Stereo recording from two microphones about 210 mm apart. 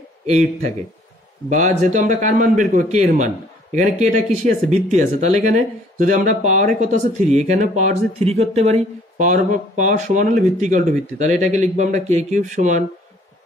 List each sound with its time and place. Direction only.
0.3 s speech: 30° right (ahead or behind)
4.3 s speech: 35° right (ahead or behind)